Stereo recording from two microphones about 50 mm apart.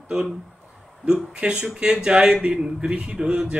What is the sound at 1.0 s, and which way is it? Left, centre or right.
Speech, centre.